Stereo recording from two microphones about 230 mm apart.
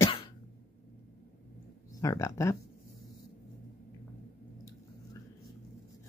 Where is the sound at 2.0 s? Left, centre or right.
Centre.